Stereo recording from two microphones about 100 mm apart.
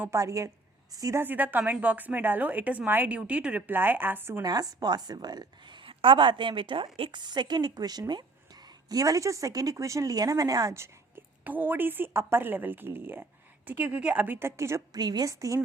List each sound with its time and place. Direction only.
0.0 s speech: 30° right (ahead or behind)
1.2 s a woman's voice: 20° right (ahead or behind)
4.4 s a woman's voice: 40° right (ahead or behind)
5.8 s a woman's voice: 60° right (ahead or behind); by 10.8 s 40° right (ahead or behind)
10.8 s a woman's voice: 20° right (ahead or behind)
14.9 s speech: 45° right (ahead or behind)